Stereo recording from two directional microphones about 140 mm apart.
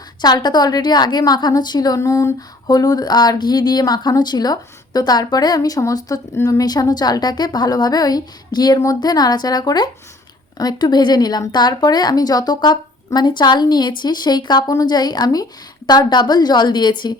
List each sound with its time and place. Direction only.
0.2 s a woman's voice: 30° left (ahead or behind)